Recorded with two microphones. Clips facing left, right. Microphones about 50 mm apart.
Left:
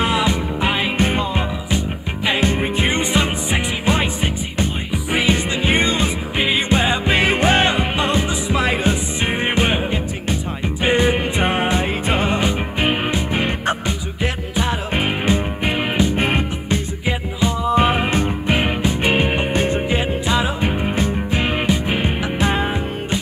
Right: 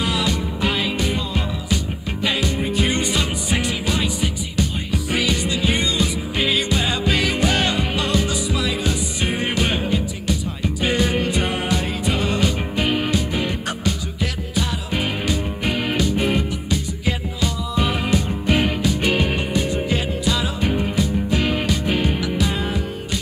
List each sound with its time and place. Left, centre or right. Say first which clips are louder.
0.0 s music: left 4 dB; left
2.2 s music: left 3 dB; left
5.1 s music: left 4 dB; left
16.2 s music: left 1 dB; left
18.5 s music: right 1 dB; left
19.9 s music: left 3 dB; left